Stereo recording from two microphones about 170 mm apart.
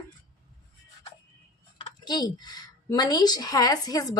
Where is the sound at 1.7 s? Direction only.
30° left (ahead or behind).